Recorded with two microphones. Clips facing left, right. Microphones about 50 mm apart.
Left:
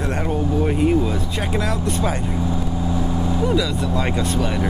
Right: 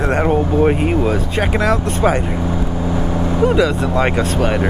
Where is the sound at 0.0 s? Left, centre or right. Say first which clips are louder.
Right 7 dB; right.